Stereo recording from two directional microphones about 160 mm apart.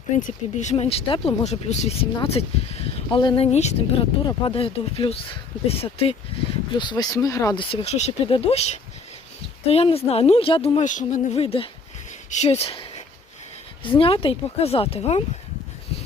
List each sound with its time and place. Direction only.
0.2 s speech: 50° left (ahead or behind)
6.7 s speech: 25° left (ahead or behind)